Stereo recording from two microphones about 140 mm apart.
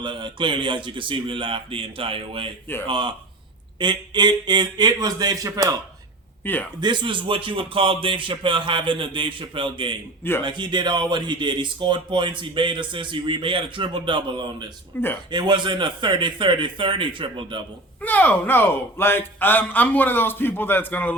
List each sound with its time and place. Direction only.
0.0 s speech: 35° right (ahead or behind)
6.4 s a man's voice: 15° left (ahead or behind)
6.7 s speech: 30° right (ahead or behind)
14.9 s a man's voice: 15° left (ahead or behind)
15.3 s speech: 30° right (ahead or behind)
18.0 s a man's voice: 10° left (ahead or behind)